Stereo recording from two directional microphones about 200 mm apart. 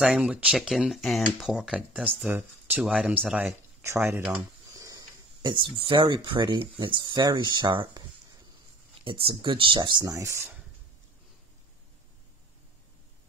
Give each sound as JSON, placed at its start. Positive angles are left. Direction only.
{"t": 0.0, "sound": "speech", "side_deg": -5}
{"t": 9.0, "sound": "speech", "side_deg": -25}